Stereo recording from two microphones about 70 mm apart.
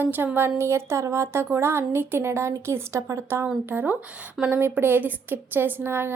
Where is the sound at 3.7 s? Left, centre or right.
Right.